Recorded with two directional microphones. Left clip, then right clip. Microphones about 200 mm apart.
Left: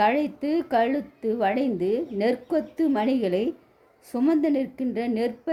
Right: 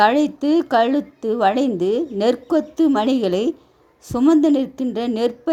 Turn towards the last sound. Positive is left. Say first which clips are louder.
# right 6 dB
turn(degrees=-30)  # may be behind; listen again after turning